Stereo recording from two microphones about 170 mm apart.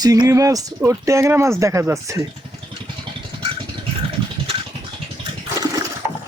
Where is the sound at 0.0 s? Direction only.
20° right (ahead or behind).